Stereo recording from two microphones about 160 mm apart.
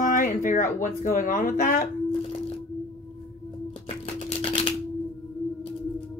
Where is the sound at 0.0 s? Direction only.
55° left (ahead or behind).